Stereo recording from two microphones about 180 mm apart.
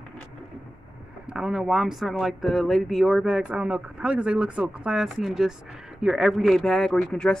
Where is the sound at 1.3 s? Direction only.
5° right (ahead or behind).